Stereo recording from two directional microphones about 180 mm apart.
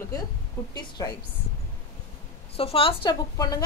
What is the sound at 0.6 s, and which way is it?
Speech, 15° left (ahead or behind).